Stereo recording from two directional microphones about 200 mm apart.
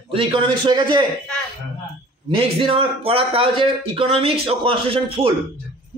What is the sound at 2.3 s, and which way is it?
Speech, 30° right (ahead or behind).